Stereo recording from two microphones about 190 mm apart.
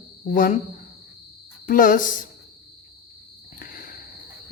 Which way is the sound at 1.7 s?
45° left (ahead or behind).